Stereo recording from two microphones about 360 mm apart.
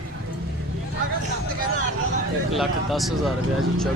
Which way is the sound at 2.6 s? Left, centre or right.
Centre.